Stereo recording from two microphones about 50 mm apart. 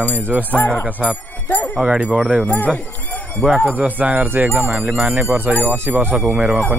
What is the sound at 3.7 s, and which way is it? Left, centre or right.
Speech, right.